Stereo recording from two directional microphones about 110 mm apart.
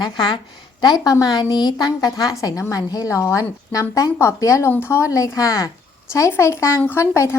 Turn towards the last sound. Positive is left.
turn(degrees=20)  # may be behind; listen again after turning